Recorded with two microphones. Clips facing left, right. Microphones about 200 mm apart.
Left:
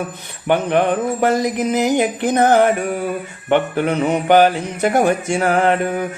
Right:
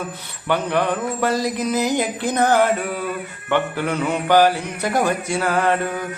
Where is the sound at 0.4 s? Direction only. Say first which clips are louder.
Left 4 dB; 20° left (ahead or behind).